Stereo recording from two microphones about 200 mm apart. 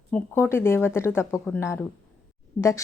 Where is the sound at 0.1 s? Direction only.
10° left (ahead or behind).